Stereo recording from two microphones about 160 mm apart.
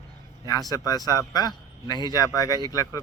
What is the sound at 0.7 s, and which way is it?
Speech, 25° left (ahead or behind).